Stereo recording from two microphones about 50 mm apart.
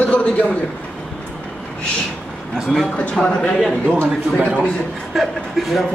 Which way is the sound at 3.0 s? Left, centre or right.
Left.